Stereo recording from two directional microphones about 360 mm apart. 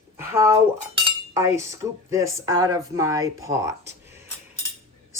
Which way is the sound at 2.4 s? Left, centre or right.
Centre.